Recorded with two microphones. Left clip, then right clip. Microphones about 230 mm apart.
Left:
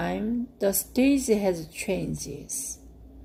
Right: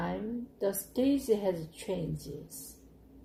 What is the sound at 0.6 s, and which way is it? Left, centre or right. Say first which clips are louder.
Speech: left 6 dB; left.